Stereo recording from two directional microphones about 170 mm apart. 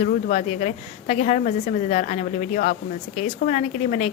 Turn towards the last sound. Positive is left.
turn(degrees=45)  # may be behind; listen again after turning